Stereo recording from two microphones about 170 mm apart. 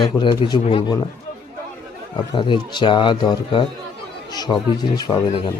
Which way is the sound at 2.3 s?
30° left (ahead or behind).